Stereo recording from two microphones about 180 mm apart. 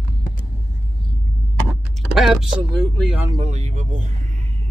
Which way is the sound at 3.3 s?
35° right (ahead or behind).